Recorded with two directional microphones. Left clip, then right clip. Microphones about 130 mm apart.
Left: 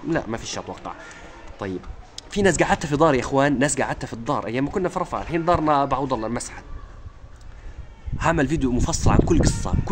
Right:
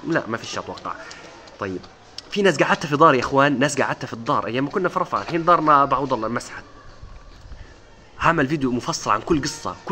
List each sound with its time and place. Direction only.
0.1 s speech: 15° left (ahead or behind)
2.3 s speech: 25° left (ahead or behind)
8.2 s speech: 20° left (ahead or behind)